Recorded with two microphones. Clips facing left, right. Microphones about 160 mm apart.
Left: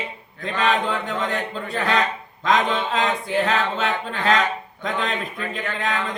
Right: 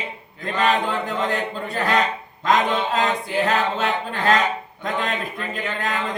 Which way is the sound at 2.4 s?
5° right (ahead or behind).